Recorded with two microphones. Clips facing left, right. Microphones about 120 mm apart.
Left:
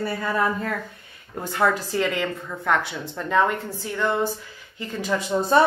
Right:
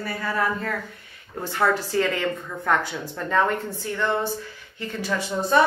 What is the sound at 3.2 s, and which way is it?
Speech, 10° left (ahead or behind).